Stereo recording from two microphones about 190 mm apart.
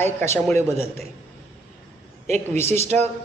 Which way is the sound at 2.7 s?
35° right (ahead or behind).